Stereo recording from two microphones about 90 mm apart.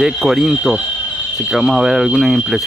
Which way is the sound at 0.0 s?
5° right (ahead or behind).